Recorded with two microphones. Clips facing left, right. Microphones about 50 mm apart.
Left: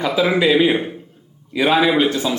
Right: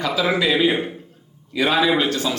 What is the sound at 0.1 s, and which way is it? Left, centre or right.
A man's voice, centre.